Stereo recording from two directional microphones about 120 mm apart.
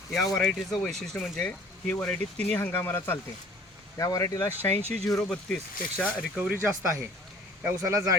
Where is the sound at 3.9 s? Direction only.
30° left (ahead or behind).